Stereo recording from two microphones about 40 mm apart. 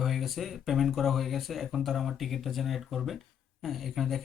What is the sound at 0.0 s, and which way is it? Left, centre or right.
Speech, centre.